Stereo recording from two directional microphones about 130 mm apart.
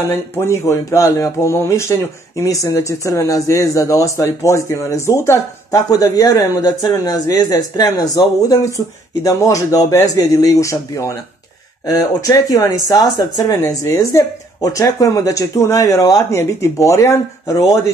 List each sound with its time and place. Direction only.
0.1 s speech: 20° left (ahead or behind)